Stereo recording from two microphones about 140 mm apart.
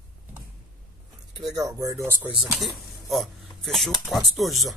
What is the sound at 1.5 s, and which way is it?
Speech, 25° right (ahead or behind).